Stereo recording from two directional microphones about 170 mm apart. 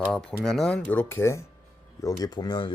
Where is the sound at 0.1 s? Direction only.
5° left (ahead or behind).